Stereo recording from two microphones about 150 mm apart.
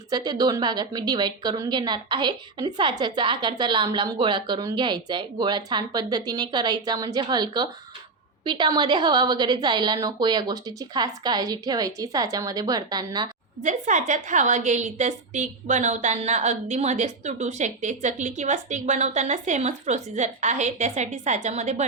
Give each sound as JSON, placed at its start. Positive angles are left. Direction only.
{"t": 0.1, "sound": "a woman's voice", "side_deg": -25}
{"t": 13.6, "sound": "a woman's voice", "side_deg": -55}